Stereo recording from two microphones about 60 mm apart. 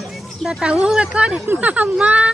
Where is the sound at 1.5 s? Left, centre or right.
Right.